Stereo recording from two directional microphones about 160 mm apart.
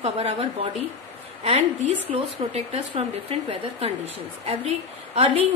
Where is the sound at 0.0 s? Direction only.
40° right (ahead or behind).